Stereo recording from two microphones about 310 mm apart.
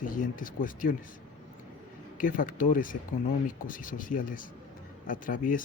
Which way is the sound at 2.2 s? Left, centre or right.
Left.